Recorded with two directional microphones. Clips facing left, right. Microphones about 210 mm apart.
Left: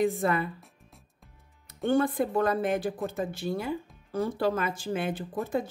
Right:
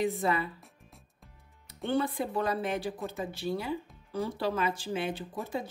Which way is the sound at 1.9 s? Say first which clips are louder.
Left 5 dB; 50° left (ahead or behind).